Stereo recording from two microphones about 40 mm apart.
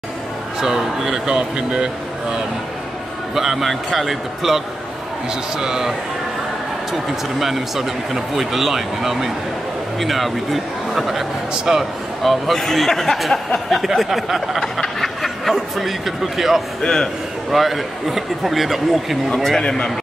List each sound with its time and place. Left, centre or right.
0.6 s speech: centre
3.3 s a man's voice: centre
11.7 s speech: centre
12.2 s a man's voice: centre
14.6 s a sound: centre
15.8 s a man's voice: centre
16.8 s a sound: centre
17.5 s a man's voice: centre
19.3 s a man's voice: centre
19.6 s a sound: centre